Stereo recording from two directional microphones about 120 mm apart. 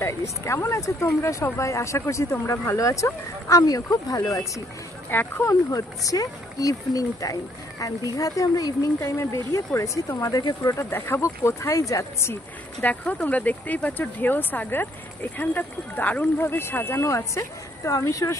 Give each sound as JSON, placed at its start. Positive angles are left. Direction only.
{"t": 0.0, "sound": "speech", "side_deg": 25}
{"t": 5.1, "sound": "speech", "side_deg": 15}
{"t": 5.5, "sound": "speech", "side_deg": 30}
{"t": 12.8, "sound": "speech", "side_deg": 10}